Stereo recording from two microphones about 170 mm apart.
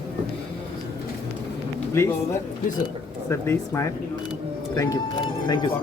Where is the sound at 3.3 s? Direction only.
15° left (ahead or behind).